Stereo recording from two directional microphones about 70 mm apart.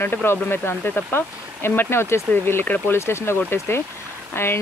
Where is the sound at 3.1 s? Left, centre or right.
Left.